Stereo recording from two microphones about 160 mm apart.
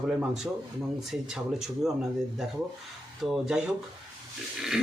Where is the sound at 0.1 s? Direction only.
5° right (ahead or behind).